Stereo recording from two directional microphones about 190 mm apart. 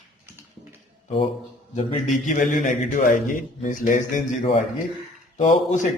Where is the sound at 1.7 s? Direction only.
40° left (ahead or behind).